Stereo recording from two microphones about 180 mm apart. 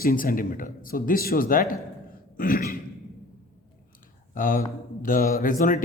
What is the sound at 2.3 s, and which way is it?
Throat clearing, 50° left (ahead or behind).